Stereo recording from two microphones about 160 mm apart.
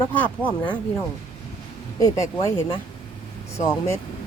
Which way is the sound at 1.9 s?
20° left (ahead or behind).